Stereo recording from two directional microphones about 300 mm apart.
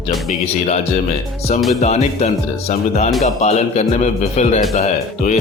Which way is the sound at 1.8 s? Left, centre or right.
Left.